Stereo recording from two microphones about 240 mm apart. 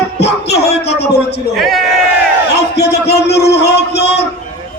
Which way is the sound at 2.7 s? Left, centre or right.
Left.